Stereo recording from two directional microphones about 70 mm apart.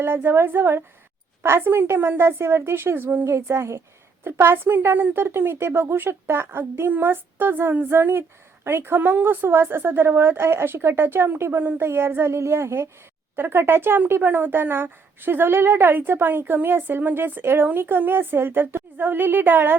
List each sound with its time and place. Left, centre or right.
0.0 s speech: right
3.2 s speech: right